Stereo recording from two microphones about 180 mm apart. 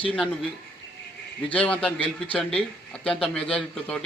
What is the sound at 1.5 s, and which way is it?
A man's voice, 10° left (ahead or behind).